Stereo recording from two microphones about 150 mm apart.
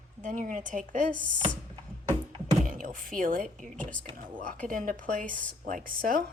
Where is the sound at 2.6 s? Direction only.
60° right (ahead or behind).